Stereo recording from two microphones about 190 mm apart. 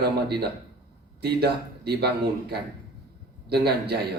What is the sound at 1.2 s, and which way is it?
Speech, 55° right (ahead or behind).